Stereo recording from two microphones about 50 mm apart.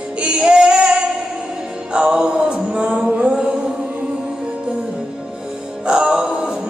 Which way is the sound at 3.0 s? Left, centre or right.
Right.